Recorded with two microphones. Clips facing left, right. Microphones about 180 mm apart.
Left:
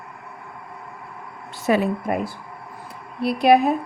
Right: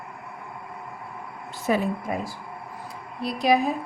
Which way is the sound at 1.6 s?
70° left (ahead or behind).